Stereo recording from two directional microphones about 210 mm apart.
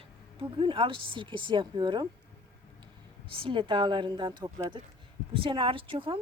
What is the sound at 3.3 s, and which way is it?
Speech, 25° right (ahead or behind).